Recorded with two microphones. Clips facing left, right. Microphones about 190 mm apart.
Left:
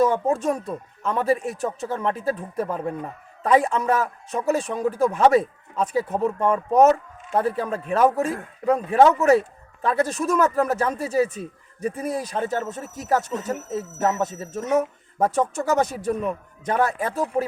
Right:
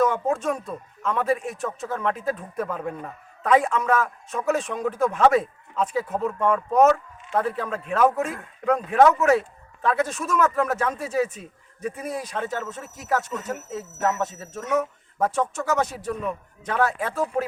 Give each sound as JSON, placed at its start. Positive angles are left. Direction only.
{"t": 0.0, "sound": "speech", "side_deg": 30}
{"t": 17.0, "sound": "speech", "side_deg": 40}